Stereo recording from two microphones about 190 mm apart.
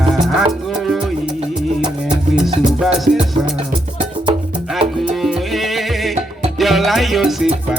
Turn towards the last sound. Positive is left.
turn(degrees=-5)  # may be behind; listen again after turning